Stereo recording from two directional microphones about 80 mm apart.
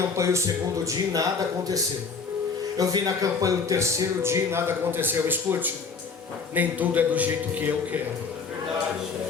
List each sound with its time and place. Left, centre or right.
0.2 s music: right
2.7 s a man's voice: right; by 7.7 s centre